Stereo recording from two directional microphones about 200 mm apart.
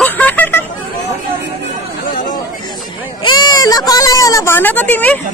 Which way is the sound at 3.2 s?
20° left (ahead or behind).